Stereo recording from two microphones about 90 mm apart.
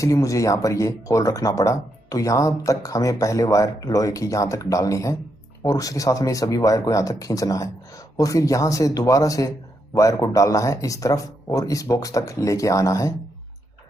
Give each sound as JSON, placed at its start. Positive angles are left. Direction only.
{"t": 0.0, "sound": "speech", "side_deg": 35}